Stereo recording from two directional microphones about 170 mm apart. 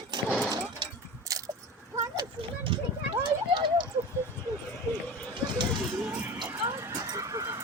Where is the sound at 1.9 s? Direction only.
30° right (ahead or behind).